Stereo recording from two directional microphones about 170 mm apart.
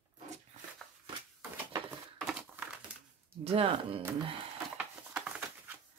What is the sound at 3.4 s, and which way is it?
Speech, 35° right (ahead or behind).